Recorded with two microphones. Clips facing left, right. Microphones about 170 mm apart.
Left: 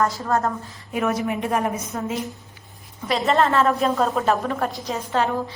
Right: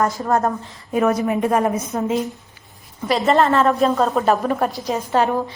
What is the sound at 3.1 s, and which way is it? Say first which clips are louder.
A woman's voice: right 3 dB; centre (ahead or behind).